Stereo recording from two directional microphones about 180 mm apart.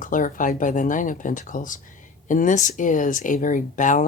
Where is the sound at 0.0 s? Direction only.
50° left (ahead or behind).